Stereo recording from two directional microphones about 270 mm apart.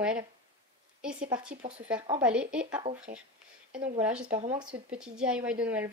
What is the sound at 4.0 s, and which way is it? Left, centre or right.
Speech, centre.